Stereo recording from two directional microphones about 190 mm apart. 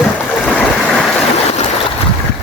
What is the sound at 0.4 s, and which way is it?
Stream, 5° left (ahead or behind).